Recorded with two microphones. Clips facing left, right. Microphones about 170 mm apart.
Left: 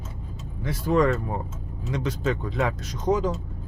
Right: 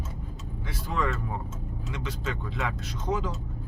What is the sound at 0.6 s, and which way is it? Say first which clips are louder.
Speech: left 9 dB; 45° left (ahead or behind).